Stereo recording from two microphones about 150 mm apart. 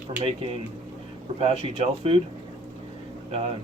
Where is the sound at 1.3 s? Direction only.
40° right (ahead or behind).